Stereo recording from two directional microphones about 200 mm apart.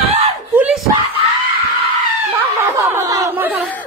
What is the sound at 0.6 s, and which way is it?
Screaming, 10° right (ahead or behind).